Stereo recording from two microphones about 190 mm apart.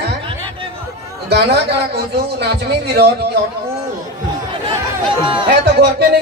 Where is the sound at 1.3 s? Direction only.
60° right (ahead or behind).